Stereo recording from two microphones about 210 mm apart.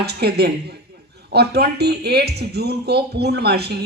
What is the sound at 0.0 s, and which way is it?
Speech, 50° right (ahead or behind).